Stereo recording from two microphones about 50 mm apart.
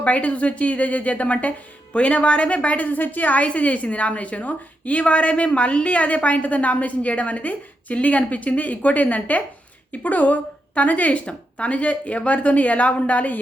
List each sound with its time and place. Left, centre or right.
0.0 s a woman's voice: left